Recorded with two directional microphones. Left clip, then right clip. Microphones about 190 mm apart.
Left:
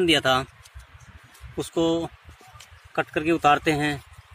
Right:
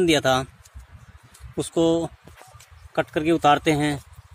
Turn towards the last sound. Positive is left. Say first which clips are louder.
# right 1 dB
turn(degrees=-45)  # may be behind; listen again after turning